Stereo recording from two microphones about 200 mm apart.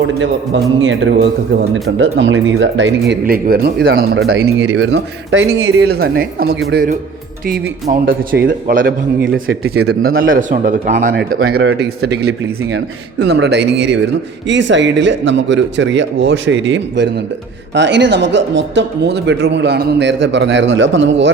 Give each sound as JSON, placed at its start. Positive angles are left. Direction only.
{"t": 0.8, "sound": "speech", "side_deg": -70}
{"t": 3.2, "sound": "speech", "side_deg": -50}
{"t": 5.8, "sound": "speech", "side_deg": -55}
{"t": 9.3, "sound": "a man's voice", "side_deg": -65}